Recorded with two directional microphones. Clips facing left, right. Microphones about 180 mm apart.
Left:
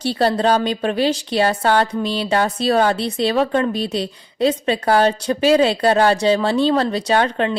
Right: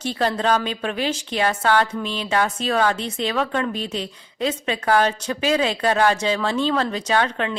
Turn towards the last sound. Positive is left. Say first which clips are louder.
# left 4 dB
turn(degrees=35)  # may be behind; listen again after turning